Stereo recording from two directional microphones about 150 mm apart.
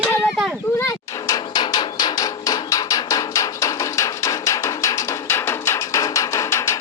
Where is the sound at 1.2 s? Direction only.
25° left (ahead or behind).